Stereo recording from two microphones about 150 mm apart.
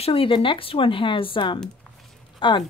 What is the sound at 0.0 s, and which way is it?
Speech, 40° left (ahead or behind).